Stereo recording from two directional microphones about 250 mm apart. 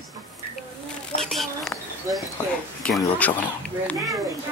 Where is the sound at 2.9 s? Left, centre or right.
Centre.